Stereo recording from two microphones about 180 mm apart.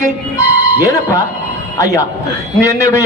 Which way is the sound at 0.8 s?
15° left (ahead or behind).